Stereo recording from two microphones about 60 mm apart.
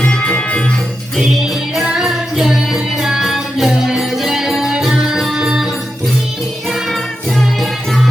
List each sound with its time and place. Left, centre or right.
0.0 s music: left
1.8 s music: centre
6.7 s music: centre